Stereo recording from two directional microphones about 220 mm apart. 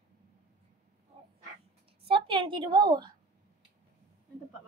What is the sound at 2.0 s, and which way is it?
A woman's voice, 25° right (ahead or behind).